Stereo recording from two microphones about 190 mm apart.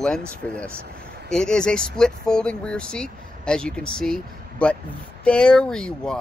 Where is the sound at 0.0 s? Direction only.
5° left (ahead or behind).